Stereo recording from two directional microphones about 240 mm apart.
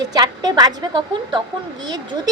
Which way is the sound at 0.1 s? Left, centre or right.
Centre.